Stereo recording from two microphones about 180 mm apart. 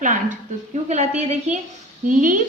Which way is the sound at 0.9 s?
40° right (ahead or behind).